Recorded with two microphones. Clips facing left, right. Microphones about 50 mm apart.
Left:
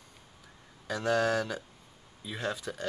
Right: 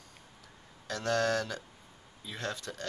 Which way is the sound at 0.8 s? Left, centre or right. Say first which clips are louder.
Left 2 dB; centre.